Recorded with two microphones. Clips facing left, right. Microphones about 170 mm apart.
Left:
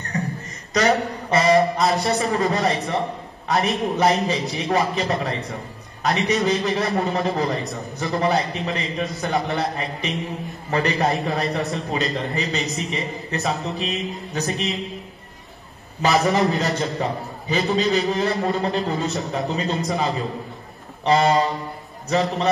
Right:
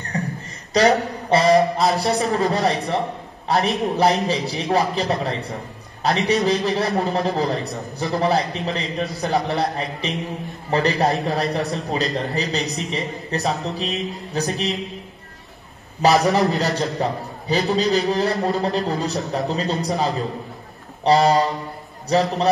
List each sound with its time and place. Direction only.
0.1 s a sound: 30° right (ahead or behind)
0.7 s speech: 30° right (ahead or behind)
1.4 s a man's voice: centre (ahead or behind)
6.0 s a man's voice: 30° right (ahead or behind)
6.3 s a man's voice: centre (ahead or behind)
10.7 s a man's voice: 35° right (ahead or behind)
11.0 s a man's voice: centre (ahead or behind)
16.1 s a man's voice: centre (ahead or behind)